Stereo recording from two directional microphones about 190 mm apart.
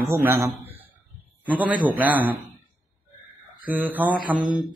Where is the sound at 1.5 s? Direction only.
5° right (ahead or behind).